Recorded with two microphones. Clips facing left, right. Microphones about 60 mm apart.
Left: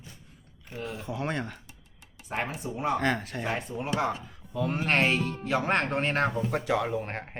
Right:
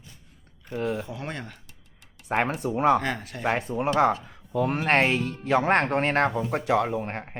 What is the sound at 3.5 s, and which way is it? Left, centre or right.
A man's voice, right.